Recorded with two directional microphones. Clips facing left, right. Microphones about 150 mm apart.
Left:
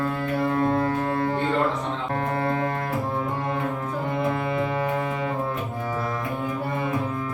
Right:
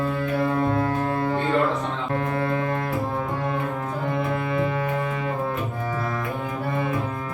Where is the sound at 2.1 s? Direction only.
35° left (ahead or behind).